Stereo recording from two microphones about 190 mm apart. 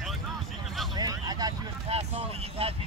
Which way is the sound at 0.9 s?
20° right (ahead or behind).